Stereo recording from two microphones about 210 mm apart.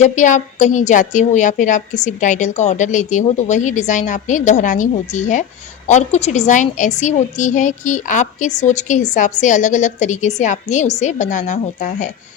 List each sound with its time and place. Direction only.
0.0 s a woman's voice: 35° left (ahead or behind)